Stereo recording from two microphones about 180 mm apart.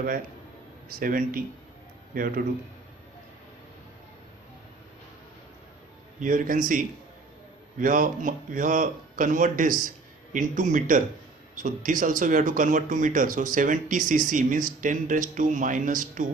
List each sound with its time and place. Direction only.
0.9 s speech: 50° right (ahead or behind)
6.1 s speech: 45° right (ahead or behind)